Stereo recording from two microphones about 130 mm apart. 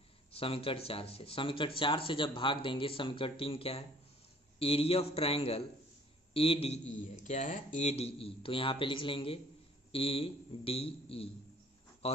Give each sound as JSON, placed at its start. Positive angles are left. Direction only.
{"t": 0.3, "sound": "speech", "side_deg": 45}
{"t": 6.9, "sound": "speech", "side_deg": 70}
{"t": 7.9, "sound": "speech", "side_deg": 50}